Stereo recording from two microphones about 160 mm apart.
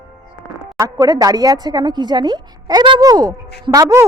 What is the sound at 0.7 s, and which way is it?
A woman's voice, 25° right (ahead or behind).